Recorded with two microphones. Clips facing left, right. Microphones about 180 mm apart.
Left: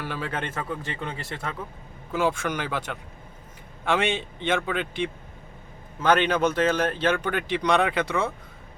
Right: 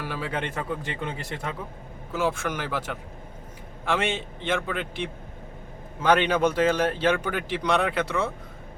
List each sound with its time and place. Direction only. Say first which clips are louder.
0.1 s speech: right 1 dB; 10° right (ahead or behind)
2.1 s a man's voice: left 2 dB; centre (ahead or behind)